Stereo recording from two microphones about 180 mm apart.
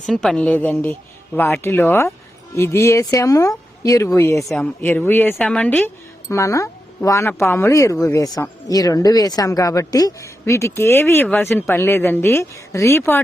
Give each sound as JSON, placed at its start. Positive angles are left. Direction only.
{"t": 0.0, "sound": "speech", "side_deg": 0}
{"t": 4.4, "sound": "speech", "side_deg": 5}